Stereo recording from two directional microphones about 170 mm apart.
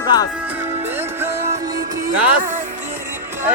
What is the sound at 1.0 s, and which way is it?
Music, 10° right (ahead or behind).